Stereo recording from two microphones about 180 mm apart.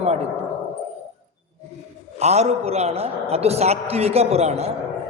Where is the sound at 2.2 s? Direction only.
35° right (ahead or behind).